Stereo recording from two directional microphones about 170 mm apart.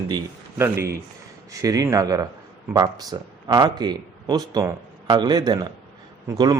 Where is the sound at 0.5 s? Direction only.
15° right (ahead or behind).